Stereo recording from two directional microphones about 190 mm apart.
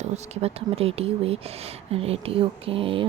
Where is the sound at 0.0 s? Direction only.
30° right (ahead or behind).